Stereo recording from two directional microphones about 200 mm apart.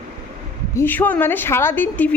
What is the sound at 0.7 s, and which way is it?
A woman's voice, 10° left (ahead or behind).